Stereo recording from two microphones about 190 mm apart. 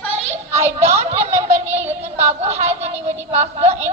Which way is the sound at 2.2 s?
35° right (ahead or behind).